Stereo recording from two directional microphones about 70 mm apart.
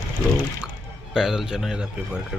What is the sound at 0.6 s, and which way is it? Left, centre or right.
Speech, centre.